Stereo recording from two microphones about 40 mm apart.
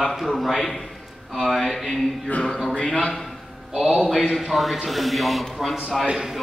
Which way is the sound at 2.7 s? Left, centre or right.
Left.